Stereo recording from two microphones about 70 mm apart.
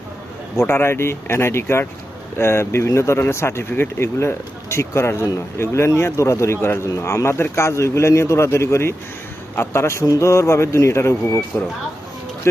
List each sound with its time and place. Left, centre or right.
0.7 s speech: left